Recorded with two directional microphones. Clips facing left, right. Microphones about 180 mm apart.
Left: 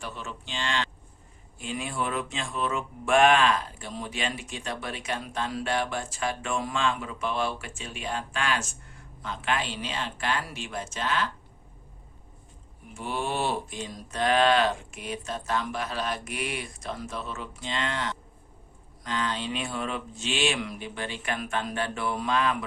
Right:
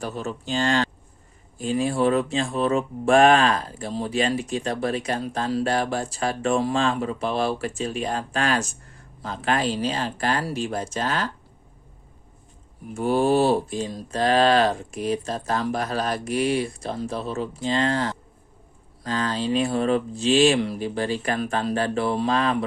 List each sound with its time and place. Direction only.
0.0 s speech: 40° right (ahead or behind)
12.9 s speech: 45° right (ahead or behind)